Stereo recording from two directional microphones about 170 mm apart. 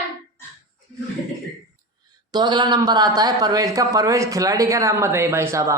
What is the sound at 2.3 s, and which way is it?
Speech, 25° right (ahead or behind).